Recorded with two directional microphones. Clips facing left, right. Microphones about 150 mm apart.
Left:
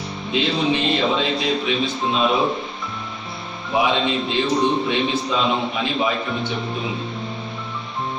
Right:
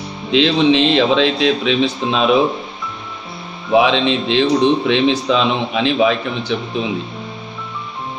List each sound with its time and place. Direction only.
0.3 s a man's voice: 90° right
3.7 s a man's voice: 90° right